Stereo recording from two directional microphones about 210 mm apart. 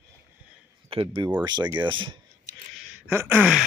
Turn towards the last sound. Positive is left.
turn(degrees=-5)  # may be behind; listen again after turning